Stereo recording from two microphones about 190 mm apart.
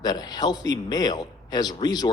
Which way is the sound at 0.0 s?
20° left (ahead or behind).